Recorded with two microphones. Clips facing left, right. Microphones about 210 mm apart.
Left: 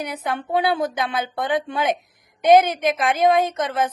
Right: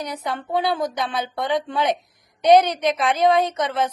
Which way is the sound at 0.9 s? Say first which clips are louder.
Left 1 dB; centre (ahead or behind).